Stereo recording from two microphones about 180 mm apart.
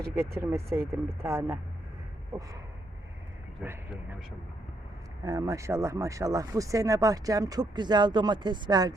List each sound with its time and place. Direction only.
0.3 s speech: 15° right (ahead or behind)
3.6 s speech: 10° right (ahead or behind)
5.2 s speech: 20° right (ahead or behind)